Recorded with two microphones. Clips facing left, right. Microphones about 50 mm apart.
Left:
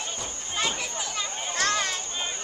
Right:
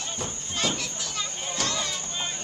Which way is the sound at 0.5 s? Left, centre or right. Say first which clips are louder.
Left 1 dB; centre.